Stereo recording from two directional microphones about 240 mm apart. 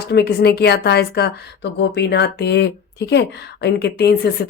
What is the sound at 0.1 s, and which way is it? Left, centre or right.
Speech, left.